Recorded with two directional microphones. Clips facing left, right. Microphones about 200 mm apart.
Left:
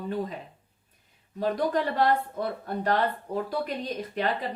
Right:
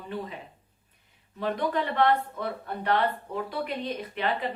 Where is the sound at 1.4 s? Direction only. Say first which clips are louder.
Left 2 dB; 40° left (ahead or behind).